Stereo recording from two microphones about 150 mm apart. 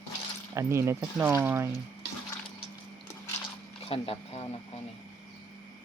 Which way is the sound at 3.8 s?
40° left (ahead or behind).